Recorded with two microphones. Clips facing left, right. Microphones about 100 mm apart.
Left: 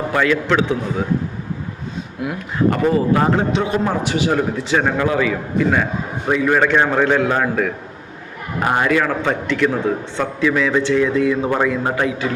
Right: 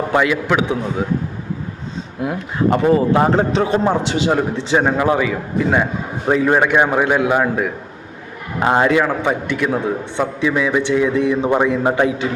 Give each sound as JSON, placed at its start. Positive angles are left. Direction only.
{"t": 0.1, "sound": "a man's voice", "side_deg": -15}
{"t": 2.2, "sound": "a man's voice", "side_deg": -25}
{"t": 3.2, "sound": "a man's voice", "side_deg": -35}